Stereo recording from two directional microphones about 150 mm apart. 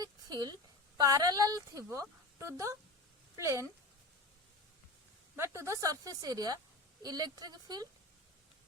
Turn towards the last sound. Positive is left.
turn(degrees=-25)  # may be behind; listen again after turning